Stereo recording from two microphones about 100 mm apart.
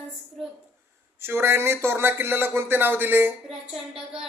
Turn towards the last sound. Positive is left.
turn(degrees=-5)  # may be behind; listen again after turning